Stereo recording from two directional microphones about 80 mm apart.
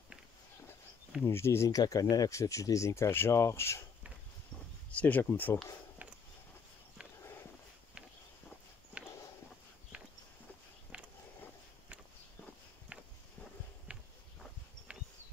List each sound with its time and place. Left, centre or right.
1.2 s speech: left
1.7 s speech: left
4.9 s speech: left
9.9 s walk: centre
10.9 s a sound: centre
12.9 s walk: centre